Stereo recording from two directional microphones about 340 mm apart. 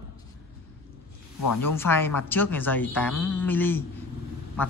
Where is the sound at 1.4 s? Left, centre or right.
Left.